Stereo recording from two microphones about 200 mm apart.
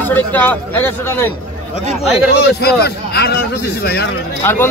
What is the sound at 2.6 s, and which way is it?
A man's voice, 55° left (ahead or behind).